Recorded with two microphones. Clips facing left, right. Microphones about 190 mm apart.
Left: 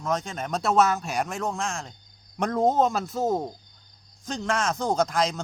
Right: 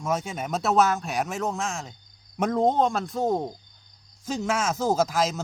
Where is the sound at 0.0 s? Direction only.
5° right (ahead or behind).